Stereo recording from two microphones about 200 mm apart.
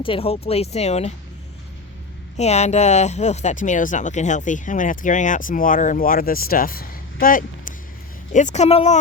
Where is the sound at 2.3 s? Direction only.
35° left (ahead or behind).